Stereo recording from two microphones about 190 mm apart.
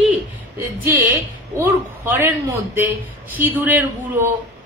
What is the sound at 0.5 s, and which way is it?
A woman's voice, 10° right (ahead or behind).